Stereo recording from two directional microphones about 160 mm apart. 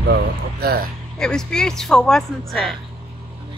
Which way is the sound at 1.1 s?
5° left (ahead or behind).